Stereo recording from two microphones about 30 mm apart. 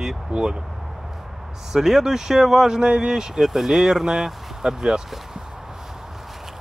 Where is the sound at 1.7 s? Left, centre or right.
Centre.